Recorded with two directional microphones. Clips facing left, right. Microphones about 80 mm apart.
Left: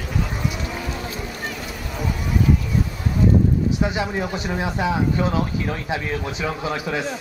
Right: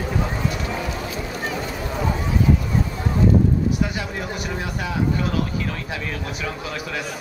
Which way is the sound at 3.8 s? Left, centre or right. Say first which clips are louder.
Left 3 dB; left.